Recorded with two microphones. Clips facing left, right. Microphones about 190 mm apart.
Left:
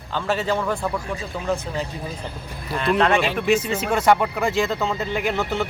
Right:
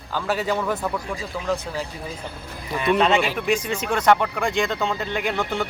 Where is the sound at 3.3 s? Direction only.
5° left (ahead or behind).